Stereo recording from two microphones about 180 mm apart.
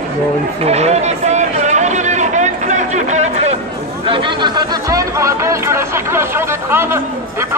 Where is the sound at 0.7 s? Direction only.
35° right (ahead or behind).